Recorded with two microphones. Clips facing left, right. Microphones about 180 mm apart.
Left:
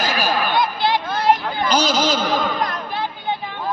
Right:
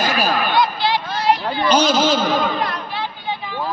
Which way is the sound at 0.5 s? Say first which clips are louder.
Right 1 dB; 50° left (ahead or behind).